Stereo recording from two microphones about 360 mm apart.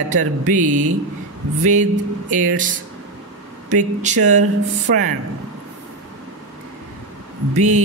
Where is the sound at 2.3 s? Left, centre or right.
Right.